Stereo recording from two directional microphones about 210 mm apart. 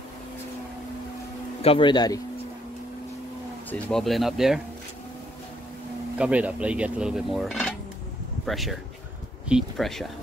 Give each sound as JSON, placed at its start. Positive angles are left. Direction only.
{"t": 1.6, "sound": "speech", "side_deg": 25}
{"t": 3.7, "sound": "cutlery", "side_deg": 0}
{"t": 6.1, "sound": "cutlery", "side_deg": -5}